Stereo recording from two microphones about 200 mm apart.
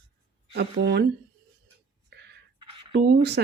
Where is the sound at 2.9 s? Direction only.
55° right (ahead or behind).